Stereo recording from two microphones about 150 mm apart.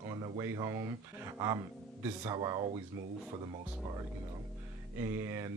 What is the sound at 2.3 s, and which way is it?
Speech, 25° right (ahead or behind).